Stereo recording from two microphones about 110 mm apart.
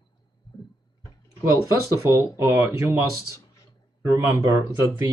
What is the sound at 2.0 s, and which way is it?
Speech, 25° right (ahead or behind).